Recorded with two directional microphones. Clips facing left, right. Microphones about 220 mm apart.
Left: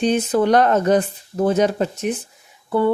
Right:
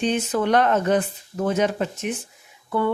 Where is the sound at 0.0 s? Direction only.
35° left (ahead or behind).